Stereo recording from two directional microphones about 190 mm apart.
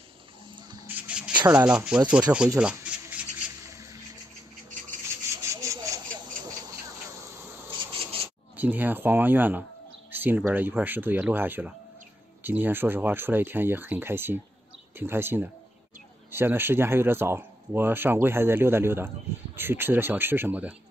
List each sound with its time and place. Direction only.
0.8 s a sound: 10° right (ahead or behind)
1.6 s speech: 5° right (ahead or behind)
2.6 s rub: 5° right (ahead or behind)
3.6 s a sound: 15° right (ahead or behind)
5.3 s rub: 15° right (ahead or behind)
7.8 s rub: 30° right (ahead or behind)
8.5 s speech: 10° right (ahead or behind)